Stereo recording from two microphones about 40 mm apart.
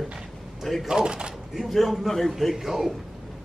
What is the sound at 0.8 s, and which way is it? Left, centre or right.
Speech, centre.